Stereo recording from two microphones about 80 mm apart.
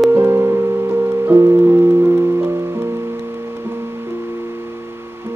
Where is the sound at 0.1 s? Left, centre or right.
Right.